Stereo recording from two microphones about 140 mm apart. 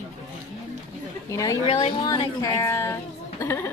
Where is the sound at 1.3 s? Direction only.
25° left (ahead or behind).